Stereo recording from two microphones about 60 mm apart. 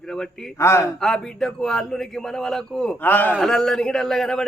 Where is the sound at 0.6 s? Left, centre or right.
Left.